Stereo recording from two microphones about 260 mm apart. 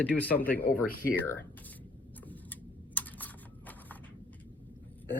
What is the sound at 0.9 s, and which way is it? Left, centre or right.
Speech, left.